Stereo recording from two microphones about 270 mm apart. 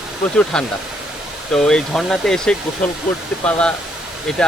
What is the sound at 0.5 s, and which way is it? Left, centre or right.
Speech, centre.